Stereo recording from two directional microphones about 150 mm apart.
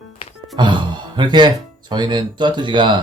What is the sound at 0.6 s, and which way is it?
Speech, 30° right (ahead or behind).